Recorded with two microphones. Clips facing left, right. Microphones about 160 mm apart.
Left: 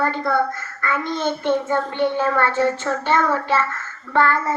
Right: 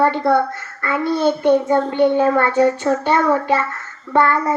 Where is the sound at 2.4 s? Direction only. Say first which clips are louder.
Right 4 dB; 15° right (ahead or behind).